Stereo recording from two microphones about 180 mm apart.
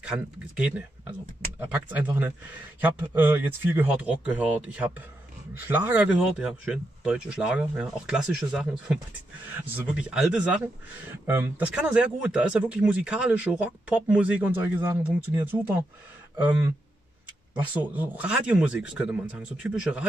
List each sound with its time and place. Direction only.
0.0 s speech: 5° right (ahead or behind)
17.6 s speech: 10° right (ahead or behind)